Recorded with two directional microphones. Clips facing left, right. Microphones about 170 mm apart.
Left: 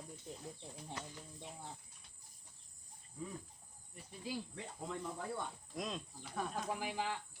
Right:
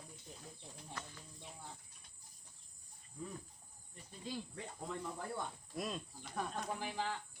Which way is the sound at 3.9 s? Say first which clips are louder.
Left 1 dB; 5° left (ahead or behind).